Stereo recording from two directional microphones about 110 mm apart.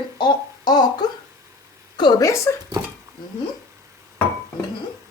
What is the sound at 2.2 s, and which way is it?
Speech, 25° left (ahead or behind).